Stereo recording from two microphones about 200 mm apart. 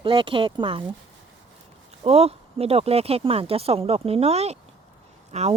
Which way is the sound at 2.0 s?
30° right (ahead or behind).